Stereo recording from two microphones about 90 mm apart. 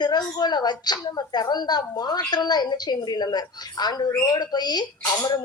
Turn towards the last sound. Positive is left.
turn(degrees=50)  # may be behind; listen again after turning